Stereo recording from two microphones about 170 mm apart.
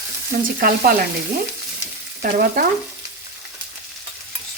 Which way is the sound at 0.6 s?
60° right (ahead or behind).